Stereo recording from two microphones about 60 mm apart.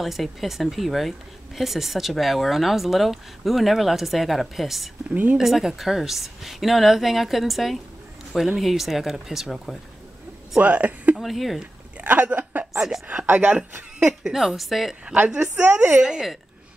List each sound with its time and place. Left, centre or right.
0.0 s a woman's voice: centre
5.1 s speech: right
5.4 s a woman's voice: centre
10.6 s speech: right
11.1 s a woman's voice: centre
12.0 s a sound: right
12.7 s a woman's voice: centre
13.1 s speech: right
13.9 s a sound: centre
14.3 s a woman's voice: centre
15.0 s a woman's voice: centre